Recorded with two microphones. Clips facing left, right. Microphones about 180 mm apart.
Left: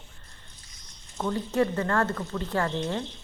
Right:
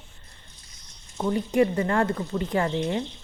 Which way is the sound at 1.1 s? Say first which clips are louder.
Right 4 dB; 15° right (ahead or behind).